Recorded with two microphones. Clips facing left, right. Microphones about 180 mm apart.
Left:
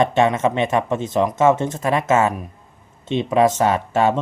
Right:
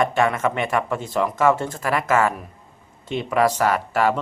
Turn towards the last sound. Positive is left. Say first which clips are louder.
# left 2 dB
turn(degrees=25)  # may be behind; listen again after turning